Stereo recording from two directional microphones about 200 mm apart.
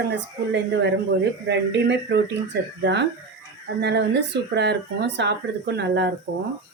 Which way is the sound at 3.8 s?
60° right (ahead or behind).